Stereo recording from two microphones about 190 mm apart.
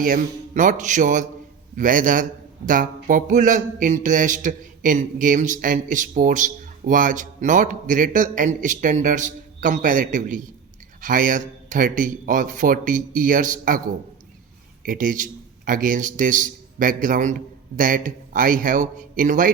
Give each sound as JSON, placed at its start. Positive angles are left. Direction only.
{"t": 0.0, "sound": "a man's voice", "side_deg": -45}
{"t": 14.8, "sound": "a man's voice", "side_deg": -45}